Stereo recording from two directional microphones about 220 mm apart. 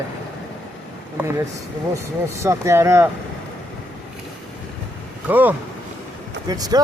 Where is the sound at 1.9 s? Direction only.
10° right (ahead or behind).